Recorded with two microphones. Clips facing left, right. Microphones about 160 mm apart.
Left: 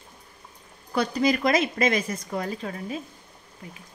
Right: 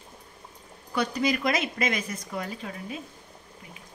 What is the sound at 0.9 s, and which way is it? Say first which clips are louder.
A woman's voice: left 3 dB; 35° left (ahead or behind).